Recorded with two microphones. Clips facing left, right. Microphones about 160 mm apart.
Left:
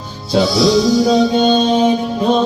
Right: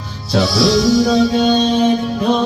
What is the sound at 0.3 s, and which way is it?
Music, 20° left (ahead or behind).